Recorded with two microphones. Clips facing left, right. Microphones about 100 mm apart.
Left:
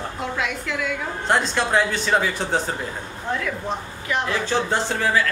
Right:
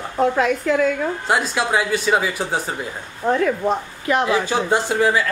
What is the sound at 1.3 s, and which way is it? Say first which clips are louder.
Speech: left 1 dB; 5° right (ahead or behind).